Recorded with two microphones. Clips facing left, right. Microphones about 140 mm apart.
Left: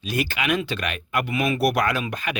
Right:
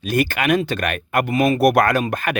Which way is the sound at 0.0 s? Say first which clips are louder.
Right 6 dB; 50° right (ahead or behind).